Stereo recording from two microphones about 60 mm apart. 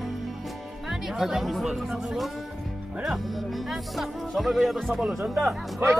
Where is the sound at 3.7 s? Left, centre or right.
Centre.